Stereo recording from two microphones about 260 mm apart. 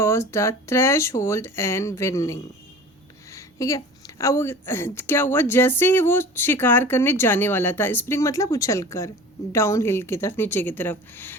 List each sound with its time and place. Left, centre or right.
0.0 s a woman's voice: centre